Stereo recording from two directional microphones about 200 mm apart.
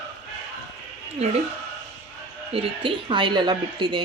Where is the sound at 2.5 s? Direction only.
25° right (ahead or behind).